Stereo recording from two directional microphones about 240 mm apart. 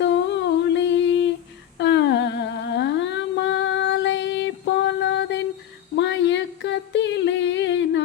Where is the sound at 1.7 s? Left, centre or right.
Left.